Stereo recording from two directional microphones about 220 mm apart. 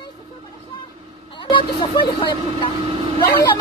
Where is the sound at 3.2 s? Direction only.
15° left (ahead or behind).